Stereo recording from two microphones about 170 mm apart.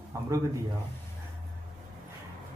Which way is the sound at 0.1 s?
20° right (ahead or behind).